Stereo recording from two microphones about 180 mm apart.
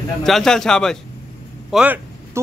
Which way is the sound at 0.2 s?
Centre (ahead or behind).